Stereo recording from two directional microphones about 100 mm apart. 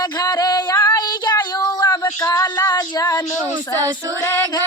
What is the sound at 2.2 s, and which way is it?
Music, 35° left (ahead or behind).